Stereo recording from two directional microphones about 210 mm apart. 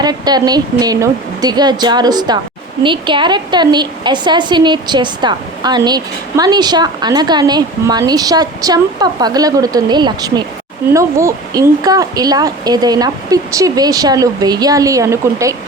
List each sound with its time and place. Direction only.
0.0 s a woman's voice: 20° right (ahead or behind)